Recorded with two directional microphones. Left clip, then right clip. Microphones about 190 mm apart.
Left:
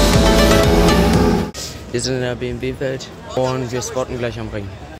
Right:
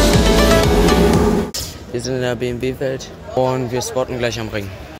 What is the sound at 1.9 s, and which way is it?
Speech, 5° left (ahead or behind).